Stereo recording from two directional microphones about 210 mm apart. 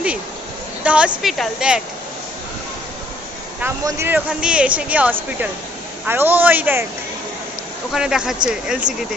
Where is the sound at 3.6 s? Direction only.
10° right (ahead or behind).